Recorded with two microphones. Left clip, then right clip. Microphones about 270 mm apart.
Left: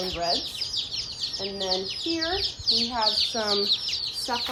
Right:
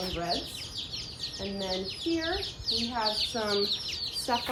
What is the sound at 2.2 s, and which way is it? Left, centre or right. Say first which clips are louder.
Speech: left 6 dB; left.